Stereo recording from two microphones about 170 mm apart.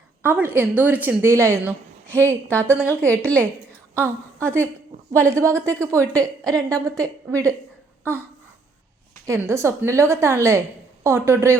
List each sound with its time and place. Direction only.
0.2 s a woman's voice: 10° right (ahead or behind)
2.0 s a woman's voice: 10° left (ahead or behind)
3.9 s a woman's voice: 15° right (ahead or behind)
9.2 s a woman's voice: 15° right (ahead or behind)